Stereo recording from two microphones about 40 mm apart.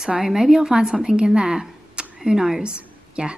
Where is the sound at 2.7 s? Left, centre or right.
Right.